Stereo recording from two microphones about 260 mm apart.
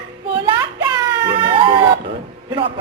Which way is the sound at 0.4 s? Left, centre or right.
Centre.